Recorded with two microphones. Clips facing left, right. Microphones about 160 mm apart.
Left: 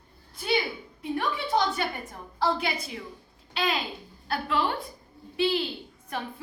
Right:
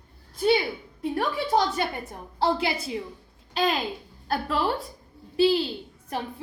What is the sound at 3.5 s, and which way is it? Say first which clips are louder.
A child's voice: right 4 dB; 40° right (ahead or behind).